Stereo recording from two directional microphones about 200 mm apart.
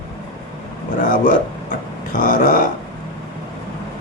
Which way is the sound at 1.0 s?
40° left (ahead or behind).